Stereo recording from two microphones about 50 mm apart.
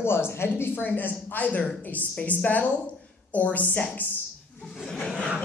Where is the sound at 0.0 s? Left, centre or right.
Left.